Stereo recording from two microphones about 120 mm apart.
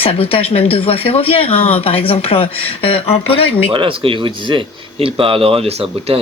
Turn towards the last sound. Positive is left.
turn(degrees=-50)  # may be behind; listen again after turning